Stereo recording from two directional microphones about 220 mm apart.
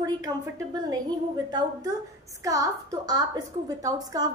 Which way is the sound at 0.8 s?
20° right (ahead or behind).